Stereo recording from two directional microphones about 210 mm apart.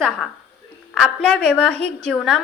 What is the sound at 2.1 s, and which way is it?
Speech, centre (ahead or behind).